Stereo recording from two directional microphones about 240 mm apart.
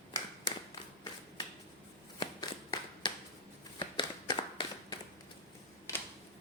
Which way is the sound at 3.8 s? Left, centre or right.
Centre.